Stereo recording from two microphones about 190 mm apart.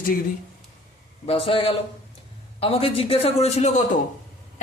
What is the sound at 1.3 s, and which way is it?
A man's voice, 30° left (ahead or behind).